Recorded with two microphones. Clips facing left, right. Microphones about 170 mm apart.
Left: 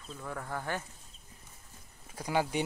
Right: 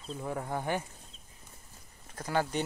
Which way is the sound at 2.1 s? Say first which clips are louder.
Even; 10° left (ahead or behind).